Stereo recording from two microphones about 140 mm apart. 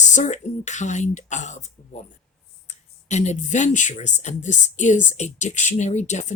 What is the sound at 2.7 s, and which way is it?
Speech, 55° left (ahead or behind).